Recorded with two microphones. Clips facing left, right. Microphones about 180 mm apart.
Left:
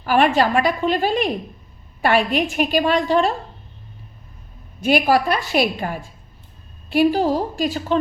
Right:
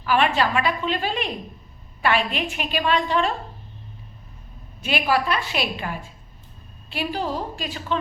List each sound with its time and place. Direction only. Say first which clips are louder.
0.0 s a woman's voice: left 4 dB; 45° left (ahead or behind)
4.8 s a woman's voice: left 6 dB; 40° left (ahead or behind)